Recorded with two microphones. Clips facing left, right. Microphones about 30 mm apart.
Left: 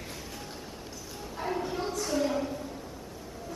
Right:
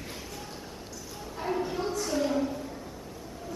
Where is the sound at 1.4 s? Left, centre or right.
Centre.